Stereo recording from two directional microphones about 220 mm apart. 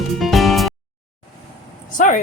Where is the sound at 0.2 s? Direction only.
Centre (ahead or behind).